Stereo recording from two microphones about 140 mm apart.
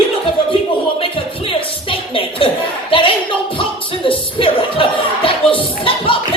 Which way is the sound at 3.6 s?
40° left (ahead or behind).